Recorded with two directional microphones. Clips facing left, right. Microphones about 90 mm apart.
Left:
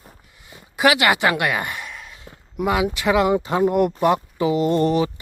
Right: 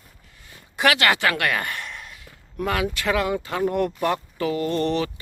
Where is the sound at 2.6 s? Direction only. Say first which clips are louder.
Left 4 dB; 15° left (ahead or behind).